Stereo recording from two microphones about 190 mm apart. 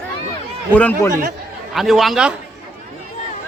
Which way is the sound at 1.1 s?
45° right (ahead or behind).